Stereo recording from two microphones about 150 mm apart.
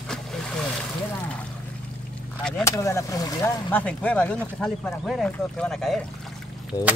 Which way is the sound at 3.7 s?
10° left (ahead or behind).